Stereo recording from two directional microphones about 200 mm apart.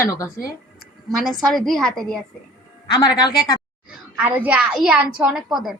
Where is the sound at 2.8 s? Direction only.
20° left (ahead or behind).